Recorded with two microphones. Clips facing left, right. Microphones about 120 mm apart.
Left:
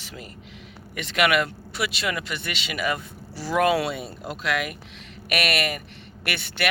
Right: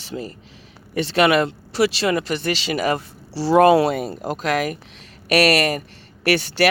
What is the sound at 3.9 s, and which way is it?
Speech, 45° right (ahead or behind).